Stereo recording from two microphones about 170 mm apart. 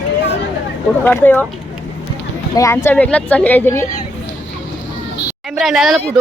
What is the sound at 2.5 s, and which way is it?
Speech, 15° left (ahead or behind).